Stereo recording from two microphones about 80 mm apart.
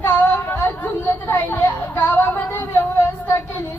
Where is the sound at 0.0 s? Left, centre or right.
Left.